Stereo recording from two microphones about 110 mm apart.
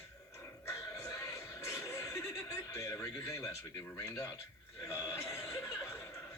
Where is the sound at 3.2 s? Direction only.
25° left (ahead or behind).